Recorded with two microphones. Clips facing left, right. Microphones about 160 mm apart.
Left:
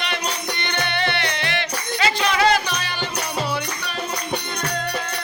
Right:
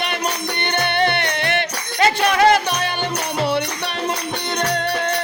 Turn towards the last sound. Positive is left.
turn(degrees=-65)  # may be behind; listen again after turning